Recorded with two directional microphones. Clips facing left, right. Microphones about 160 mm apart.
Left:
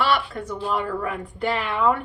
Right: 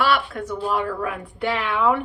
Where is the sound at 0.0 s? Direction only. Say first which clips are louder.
Right 1 dB; 5° right (ahead or behind).